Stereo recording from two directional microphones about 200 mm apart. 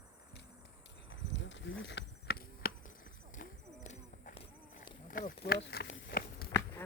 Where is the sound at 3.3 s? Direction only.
35° left (ahead or behind).